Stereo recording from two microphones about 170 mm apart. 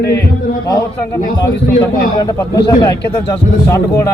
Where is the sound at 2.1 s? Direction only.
20° left (ahead or behind).